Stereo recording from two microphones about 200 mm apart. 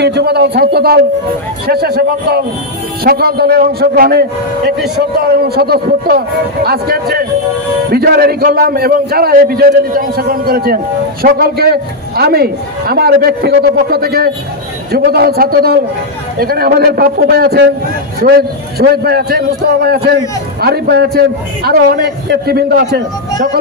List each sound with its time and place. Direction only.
0.0 s a man's voice: 55° right (ahead or behind)
5.2 s a man's voice: 50° right (ahead or behind)